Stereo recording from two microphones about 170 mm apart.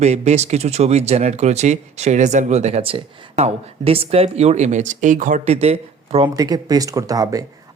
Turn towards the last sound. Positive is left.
turn(degrees=-20)  # may be behind; listen again after turning